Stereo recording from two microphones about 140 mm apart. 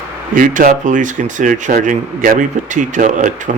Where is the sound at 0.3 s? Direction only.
70° right (ahead or behind).